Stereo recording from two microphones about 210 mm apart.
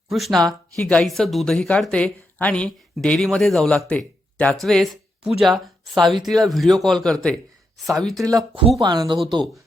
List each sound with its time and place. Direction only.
0.1 s speech: centre (ahead or behind)
8.2 s speech: 15° right (ahead or behind)